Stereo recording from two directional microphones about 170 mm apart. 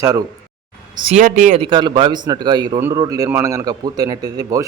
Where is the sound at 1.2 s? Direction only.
50° right (ahead or behind).